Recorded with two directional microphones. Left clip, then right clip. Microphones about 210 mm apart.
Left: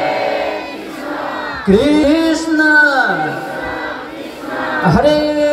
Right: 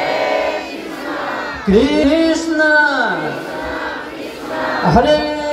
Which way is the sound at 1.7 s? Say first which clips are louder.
Left 1 dB; 35° left (ahead or behind).